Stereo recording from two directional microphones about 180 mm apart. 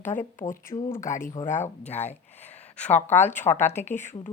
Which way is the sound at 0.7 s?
30° left (ahead or behind).